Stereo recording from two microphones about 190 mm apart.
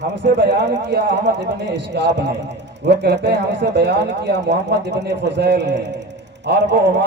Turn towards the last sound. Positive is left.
turn(degrees=-65)  # may be behind; listen again after turning